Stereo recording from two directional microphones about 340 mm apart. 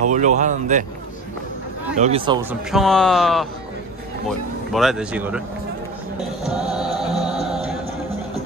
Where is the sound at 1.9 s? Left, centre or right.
Centre.